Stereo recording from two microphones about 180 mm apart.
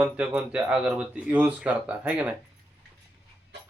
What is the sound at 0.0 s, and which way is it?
Speech, 5° right (ahead or behind).